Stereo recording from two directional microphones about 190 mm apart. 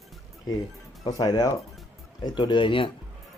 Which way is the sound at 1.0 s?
20° left (ahead or behind).